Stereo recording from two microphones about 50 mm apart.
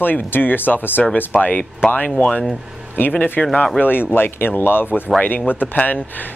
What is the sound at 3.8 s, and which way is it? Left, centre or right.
Speech, left.